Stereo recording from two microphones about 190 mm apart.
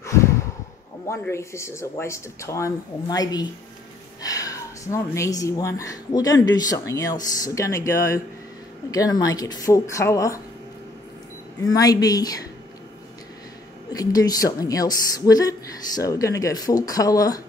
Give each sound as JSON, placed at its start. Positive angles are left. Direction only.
{"t": 0.0, "sound": "a sound", "side_deg": 15}
{"t": 1.0, "sound": "a woman's voice", "side_deg": 15}
{"t": 11.6, "sound": "a woman's voice", "side_deg": 20}
{"t": 13.9, "sound": "a woman's voice", "side_deg": 20}